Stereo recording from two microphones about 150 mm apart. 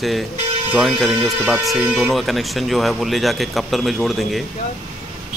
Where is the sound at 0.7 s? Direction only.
Centre (ahead or behind).